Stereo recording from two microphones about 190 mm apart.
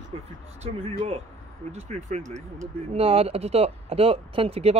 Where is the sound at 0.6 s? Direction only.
30° right (ahead or behind).